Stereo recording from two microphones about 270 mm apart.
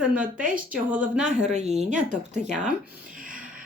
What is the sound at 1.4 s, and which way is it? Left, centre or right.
Speech, right.